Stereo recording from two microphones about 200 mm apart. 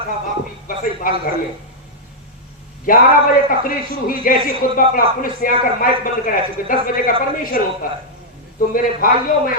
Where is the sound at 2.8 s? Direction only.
45° left (ahead or behind).